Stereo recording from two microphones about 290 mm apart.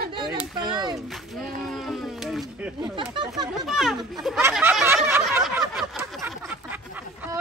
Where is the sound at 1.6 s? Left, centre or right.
Centre.